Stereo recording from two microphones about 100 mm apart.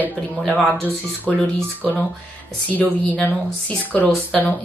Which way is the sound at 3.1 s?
15° left (ahead or behind).